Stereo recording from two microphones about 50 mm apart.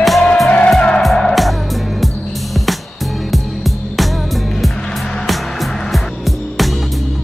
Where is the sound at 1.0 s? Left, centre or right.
Centre.